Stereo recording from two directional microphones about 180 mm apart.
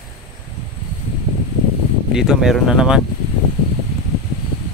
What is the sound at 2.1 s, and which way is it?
Speech, 5° right (ahead or behind).